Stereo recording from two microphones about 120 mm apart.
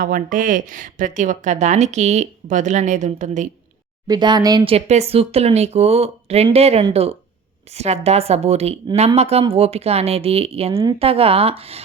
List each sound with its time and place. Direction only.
0.2 s speech: 90° right
4.0 s speech: 35° right (ahead or behind)
4.6 s speech: 60° right (ahead or behind)